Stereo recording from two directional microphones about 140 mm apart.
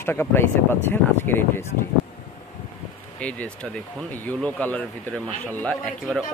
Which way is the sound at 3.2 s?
10° left (ahead or behind).